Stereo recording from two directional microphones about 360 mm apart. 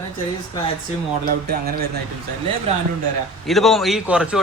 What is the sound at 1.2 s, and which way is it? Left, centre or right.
Speech, right.